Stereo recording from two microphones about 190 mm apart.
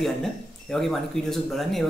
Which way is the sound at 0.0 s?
Centre (ahead or behind).